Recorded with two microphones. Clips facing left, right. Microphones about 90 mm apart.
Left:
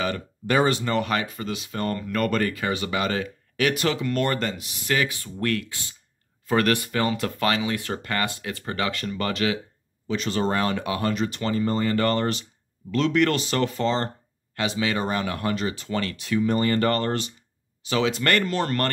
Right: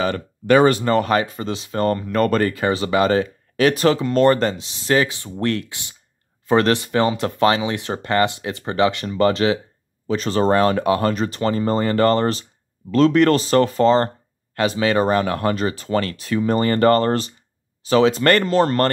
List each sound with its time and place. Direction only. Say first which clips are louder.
0.5 s speech: right 7 dB; 70° right (ahead or behind)
0.7 s speech: right 7 dB; 40° right (ahead or behind)
2.0 s speech: right 7 dB; 25° right (ahead or behind)
2.2 s speech: right 5 dB; 35° right (ahead or behind)